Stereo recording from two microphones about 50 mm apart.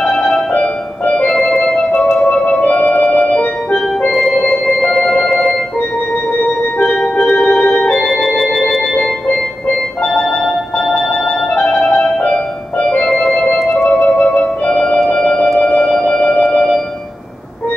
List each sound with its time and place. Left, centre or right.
1.0 s music: left
1.4 s organ: centre
2.0 s music: centre
4.1 s music: centre
6.6 s organ: left
8.0 s organ: centre
10.0 s music: centre
11.1 s music: centre
12.9 s organ: centre
13.8 s music: left